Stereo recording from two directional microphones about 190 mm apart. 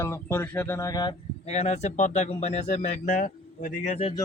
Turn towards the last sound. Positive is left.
turn(degrees=35)  # may be behind; listen again after turning